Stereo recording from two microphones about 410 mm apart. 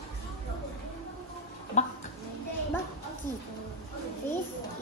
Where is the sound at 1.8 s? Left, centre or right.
Centre.